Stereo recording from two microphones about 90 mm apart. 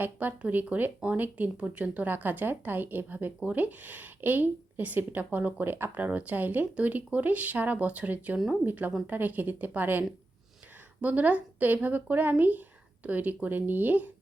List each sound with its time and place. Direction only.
0.0 s speech: 20° right (ahead or behind)
11.0 s speech: 15° right (ahead or behind)